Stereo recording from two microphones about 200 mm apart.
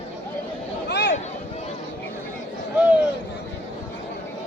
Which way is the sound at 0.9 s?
55° left (ahead or behind).